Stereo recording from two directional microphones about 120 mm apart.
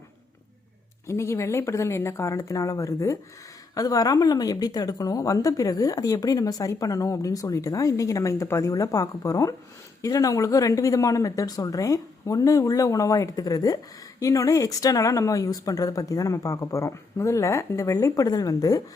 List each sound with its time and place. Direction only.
1.0 s a woman's voice: 25° left (ahead or behind)